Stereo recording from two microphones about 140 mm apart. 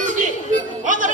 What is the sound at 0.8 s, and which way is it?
Music, 65° right (ahead or behind).